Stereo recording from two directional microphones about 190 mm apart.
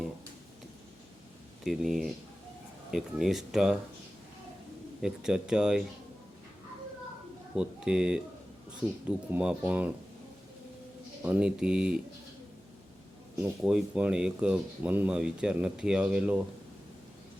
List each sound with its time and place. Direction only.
1.6 s speech: centre (ahead or behind)
5.0 s speech: 5° right (ahead or behind)
7.5 s speech: 5° right (ahead or behind)
9.3 s speech: 5° right (ahead or behind)
11.2 s speech: 5° right (ahead or behind)
13.3 s speech: 5° right (ahead or behind)